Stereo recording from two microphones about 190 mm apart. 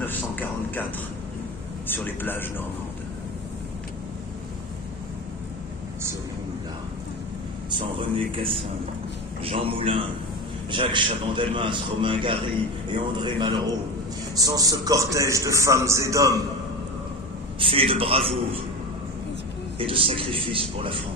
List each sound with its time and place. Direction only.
0.0 s a sound: 10° left (ahead or behind)
1.9 s a man's voice: 10° left (ahead or behind)
9.4 s a man's voice: 30° right (ahead or behind)
17.6 s a man's voice: 30° right (ahead or behind)
19.8 s a man's voice: 30° right (ahead or behind)